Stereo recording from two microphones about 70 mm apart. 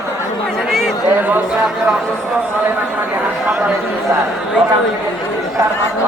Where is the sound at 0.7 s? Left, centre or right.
Centre.